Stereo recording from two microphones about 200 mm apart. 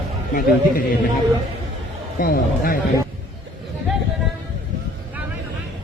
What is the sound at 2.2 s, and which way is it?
Speech, 45° left (ahead or behind).